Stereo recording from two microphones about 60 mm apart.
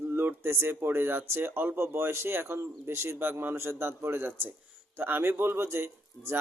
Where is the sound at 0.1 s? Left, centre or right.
Right.